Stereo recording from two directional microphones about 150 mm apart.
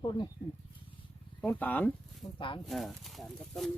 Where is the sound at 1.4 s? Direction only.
10° left (ahead or behind).